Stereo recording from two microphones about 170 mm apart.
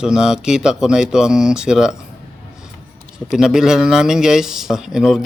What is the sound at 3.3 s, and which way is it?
A man's voice, 5° right (ahead or behind).